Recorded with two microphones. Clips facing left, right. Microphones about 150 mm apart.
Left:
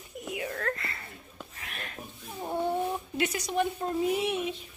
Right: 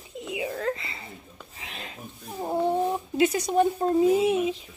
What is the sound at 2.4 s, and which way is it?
Speech, 30° right (ahead or behind).